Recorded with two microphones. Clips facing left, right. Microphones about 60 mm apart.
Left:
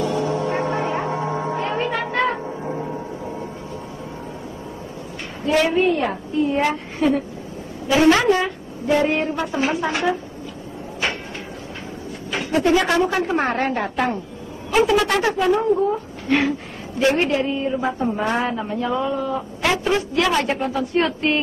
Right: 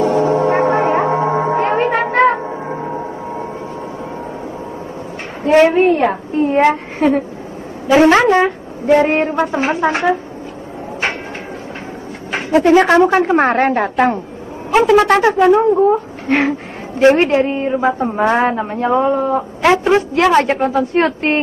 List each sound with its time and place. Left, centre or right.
0.0 s music: right
5.4 s a woman's voice: right
12.3 s speech: right